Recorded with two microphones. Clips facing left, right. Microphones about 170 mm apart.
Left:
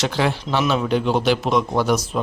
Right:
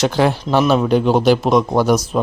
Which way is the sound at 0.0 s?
45° right (ahead or behind).